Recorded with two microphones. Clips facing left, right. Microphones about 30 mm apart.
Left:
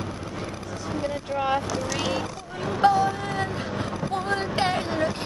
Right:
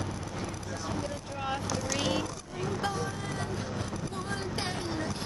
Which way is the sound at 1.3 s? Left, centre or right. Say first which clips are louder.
Left 11 dB; left.